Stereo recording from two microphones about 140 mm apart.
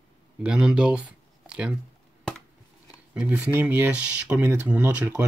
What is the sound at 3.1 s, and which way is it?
Speech, 10° right (ahead or behind).